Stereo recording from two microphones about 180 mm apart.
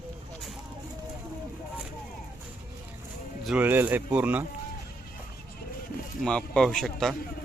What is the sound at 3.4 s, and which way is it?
Speech, 10° right (ahead or behind).